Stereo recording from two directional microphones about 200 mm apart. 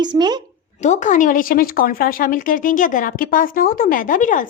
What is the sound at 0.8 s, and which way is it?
Speech, 35° left (ahead or behind).